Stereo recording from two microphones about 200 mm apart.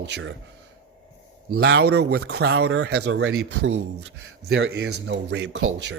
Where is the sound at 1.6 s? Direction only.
55° right (ahead or behind); by 3.7 s 85° right.